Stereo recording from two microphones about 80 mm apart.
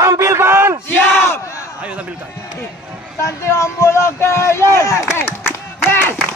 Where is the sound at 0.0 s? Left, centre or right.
Right.